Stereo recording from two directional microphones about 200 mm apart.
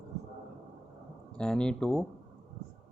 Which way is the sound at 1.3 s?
5° left (ahead or behind).